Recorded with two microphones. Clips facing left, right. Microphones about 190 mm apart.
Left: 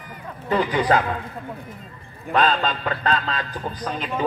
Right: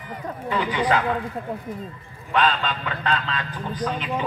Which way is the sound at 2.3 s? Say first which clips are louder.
Left 2 dB; 40° left (ahead or behind).